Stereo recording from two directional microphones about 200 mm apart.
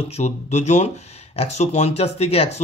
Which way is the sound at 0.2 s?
35° left (ahead or behind).